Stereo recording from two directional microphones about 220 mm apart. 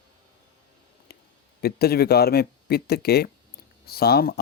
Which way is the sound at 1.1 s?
45° left (ahead or behind).